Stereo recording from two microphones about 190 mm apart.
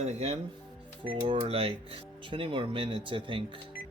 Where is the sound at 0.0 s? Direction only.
35° right (ahead or behind).